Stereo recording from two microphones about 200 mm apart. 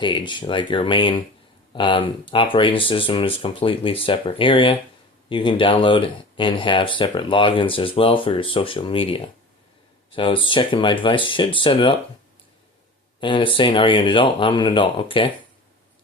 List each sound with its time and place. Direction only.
0.0 s speech: 25° left (ahead or behind)
13.1 s speech: 25° left (ahead or behind)